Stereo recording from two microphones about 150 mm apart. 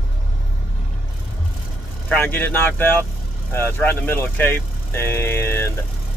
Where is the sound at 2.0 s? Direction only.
15° left (ahead or behind).